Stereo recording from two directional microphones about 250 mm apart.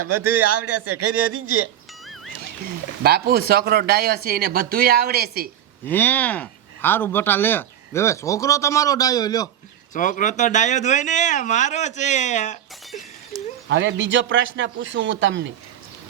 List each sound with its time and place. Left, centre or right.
0.0 s a man's voice: right
3.0 s speech: right
5.8 s speech: centre
9.9 s speech: left
13.3 s a sound: centre
13.7 s a man's voice: right